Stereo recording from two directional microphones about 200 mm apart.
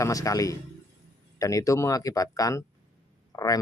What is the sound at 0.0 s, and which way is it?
Speech, 15° left (ahead or behind).